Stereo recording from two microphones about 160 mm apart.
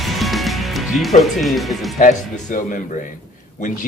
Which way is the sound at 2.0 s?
55° left (ahead or behind).